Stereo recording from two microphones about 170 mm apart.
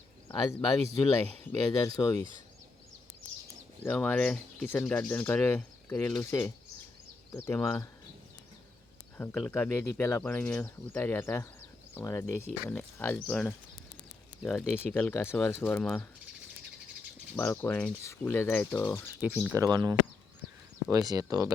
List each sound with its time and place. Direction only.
0.3 s speech: 20° left (ahead or behind)
3.8 s speech: 10° left (ahead or behind)
9.1 s speech: 10° left (ahead or behind)
17.3 s speech: 10° left (ahead or behind)
19.5 s speech: 20° right (ahead or behind)